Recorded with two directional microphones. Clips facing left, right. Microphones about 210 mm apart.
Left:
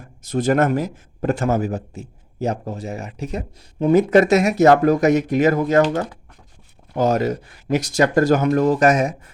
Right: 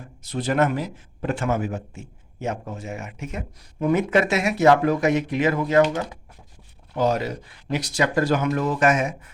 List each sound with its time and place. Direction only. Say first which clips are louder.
0.2 s speech: left 4 dB; 45° left (ahead or behind)